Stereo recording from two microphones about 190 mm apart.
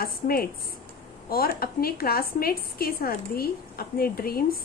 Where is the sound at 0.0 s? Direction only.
50° left (ahead or behind).